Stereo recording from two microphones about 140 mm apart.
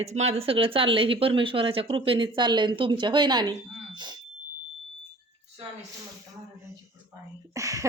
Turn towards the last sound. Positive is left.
turn(degrees=-25)  # may be behind; listen again after turning